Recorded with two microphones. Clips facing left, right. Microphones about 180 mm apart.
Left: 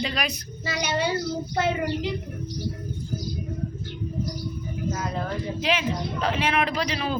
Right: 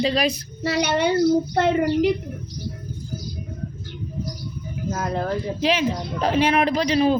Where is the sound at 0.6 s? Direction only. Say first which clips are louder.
Right 6 dB; 65° right (ahead or behind).